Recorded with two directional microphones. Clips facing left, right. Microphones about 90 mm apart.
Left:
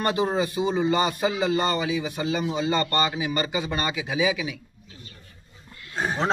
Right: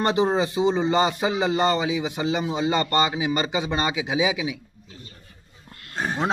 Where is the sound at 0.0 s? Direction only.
25° right (ahead or behind).